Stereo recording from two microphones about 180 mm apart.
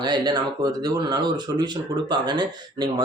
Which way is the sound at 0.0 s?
20° right (ahead or behind).